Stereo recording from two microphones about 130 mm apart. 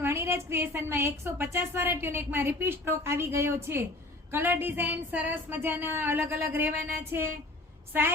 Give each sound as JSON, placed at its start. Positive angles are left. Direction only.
{"t": 0.0, "sound": "a woman's voice", "side_deg": -20}